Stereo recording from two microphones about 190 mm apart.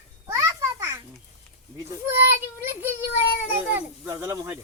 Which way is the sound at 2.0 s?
15° right (ahead or behind).